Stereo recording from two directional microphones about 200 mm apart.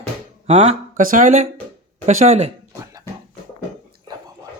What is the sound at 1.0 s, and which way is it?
Speech, 40° right (ahead or behind).